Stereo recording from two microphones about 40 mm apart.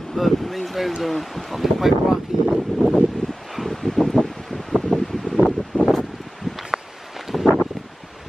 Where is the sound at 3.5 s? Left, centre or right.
Centre.